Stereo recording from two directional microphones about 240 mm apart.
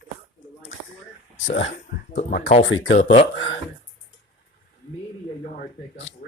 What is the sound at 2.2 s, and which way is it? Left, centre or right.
Speech, left.